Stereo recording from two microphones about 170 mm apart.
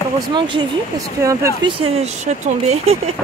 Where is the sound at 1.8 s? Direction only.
40° right (ahead or behind).